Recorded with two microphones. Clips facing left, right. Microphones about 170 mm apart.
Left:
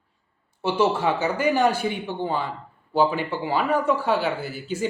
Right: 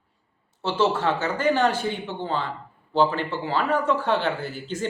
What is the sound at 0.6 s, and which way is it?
Speech, 10° left (ahead or behind).